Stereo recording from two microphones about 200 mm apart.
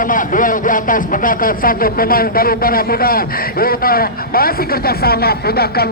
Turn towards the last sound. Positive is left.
turn(degrees=50)  # may be behind; listen again after turning